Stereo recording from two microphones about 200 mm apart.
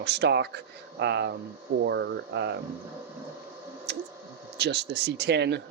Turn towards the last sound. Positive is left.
turn(degrees=-60)  # may be behind; listen again after turning